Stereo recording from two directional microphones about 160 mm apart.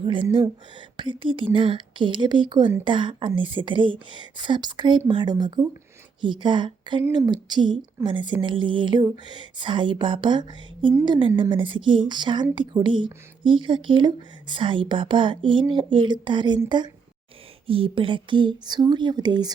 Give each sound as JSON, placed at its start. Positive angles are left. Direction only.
{"t": 0.0, "sound": "a woman's voice", "side_deg": -30}